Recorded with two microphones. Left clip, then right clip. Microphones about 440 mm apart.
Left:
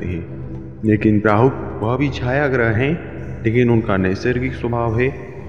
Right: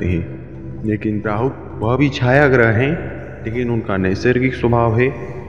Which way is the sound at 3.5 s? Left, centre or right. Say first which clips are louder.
Left 6 dB; left.